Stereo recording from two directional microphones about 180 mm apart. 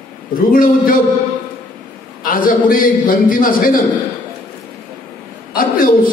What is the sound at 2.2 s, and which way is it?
A man's voice, 50° left (ahead or behind).